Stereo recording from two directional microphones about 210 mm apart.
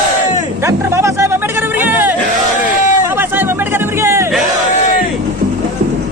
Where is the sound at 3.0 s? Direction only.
10° right (ahead or behind).